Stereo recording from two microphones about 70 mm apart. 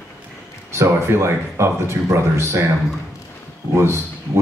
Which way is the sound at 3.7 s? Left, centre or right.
Right.